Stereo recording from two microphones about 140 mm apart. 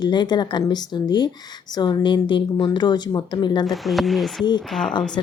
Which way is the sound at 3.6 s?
Centre (ahead or behind).